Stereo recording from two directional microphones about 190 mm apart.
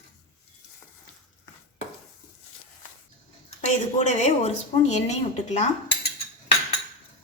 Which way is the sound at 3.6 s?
35° left (ahead or behind).